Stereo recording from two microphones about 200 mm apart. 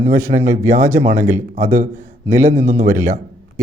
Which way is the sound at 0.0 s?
40° right (ahead or behind).